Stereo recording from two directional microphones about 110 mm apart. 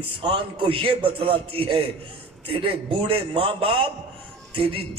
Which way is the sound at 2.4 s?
55° right (ahead or behind).